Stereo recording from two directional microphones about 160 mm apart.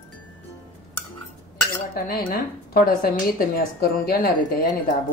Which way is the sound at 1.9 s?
65° left (ahead or behind).